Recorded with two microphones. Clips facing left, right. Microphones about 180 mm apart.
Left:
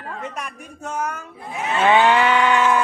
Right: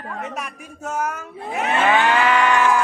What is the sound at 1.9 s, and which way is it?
Music, 25° left (ahead or behind).